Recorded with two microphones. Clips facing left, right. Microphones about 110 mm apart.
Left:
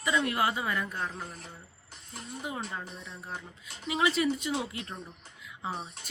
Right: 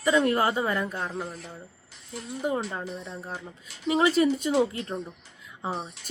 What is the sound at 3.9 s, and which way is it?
Speech, 40° right (ahead or behind).